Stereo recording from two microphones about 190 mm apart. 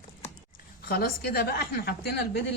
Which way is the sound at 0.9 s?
50° left (ahead or behind).